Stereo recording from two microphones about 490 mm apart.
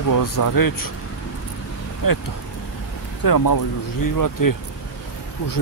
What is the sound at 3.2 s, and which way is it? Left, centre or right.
Speech, left.